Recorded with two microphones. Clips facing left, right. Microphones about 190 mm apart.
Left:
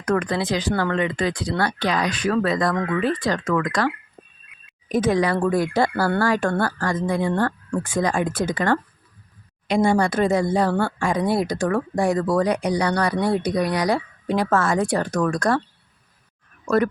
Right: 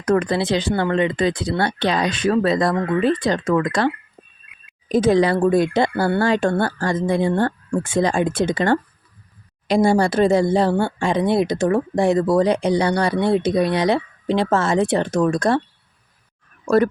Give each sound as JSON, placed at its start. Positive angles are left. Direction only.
{"t": 0.0, "sound": "speech", "side_deg": -25}
{"t": 16.6, "sound": "speech", "side_deg": -30}